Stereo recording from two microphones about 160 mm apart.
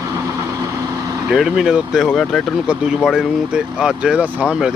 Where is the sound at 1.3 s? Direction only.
Centre (ahead or behind).